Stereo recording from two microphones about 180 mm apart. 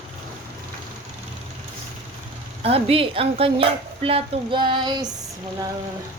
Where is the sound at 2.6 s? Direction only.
35° right (ahead or behind).